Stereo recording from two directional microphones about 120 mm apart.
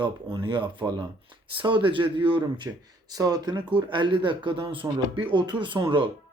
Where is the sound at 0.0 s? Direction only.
45° right (ahead or behind).